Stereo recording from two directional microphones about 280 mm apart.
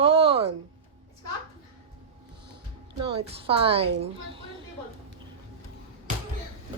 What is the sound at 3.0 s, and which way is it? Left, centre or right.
A woman's voice, centre.